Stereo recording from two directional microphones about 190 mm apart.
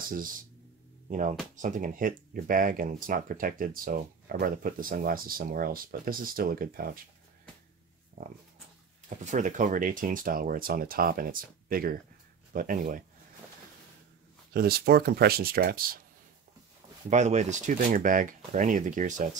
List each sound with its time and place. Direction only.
1.6 s speech: 45° right (ahead or behind)
9.2 s speech: 40° right (ahead or behind)
14.5 s speech: 50° right (ahead or behind)
17.1 s speech: 35° right (ahead or behind)